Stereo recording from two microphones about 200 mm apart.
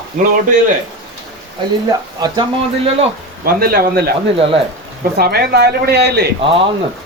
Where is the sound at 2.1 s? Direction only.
20° right (ahead or behind).